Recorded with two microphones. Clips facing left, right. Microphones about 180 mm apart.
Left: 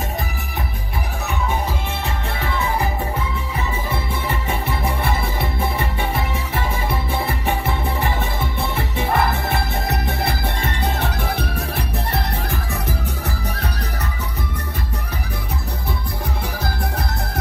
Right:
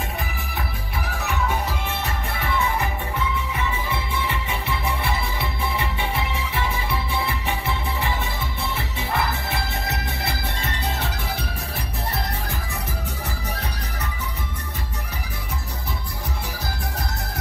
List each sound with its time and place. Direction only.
2.4 s music: 25° left (ahead or behind)
3.5 s music: 45° left (ahead or behind)